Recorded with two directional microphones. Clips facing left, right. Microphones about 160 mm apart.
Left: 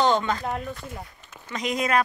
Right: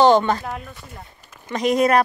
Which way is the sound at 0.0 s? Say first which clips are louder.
Right 7 dB; 70° right (ahead or behind).